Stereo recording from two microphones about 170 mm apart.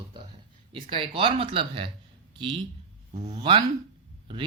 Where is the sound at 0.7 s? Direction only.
30° right (ahead or behind).